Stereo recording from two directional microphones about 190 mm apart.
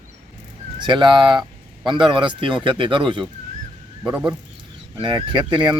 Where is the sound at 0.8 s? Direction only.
25° right (ahead or behind).